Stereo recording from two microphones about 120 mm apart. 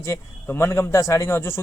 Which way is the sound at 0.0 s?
20° left (ahead or behind).